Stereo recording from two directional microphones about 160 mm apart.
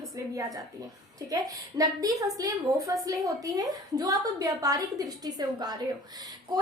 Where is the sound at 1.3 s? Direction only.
25° right (ahead or behind).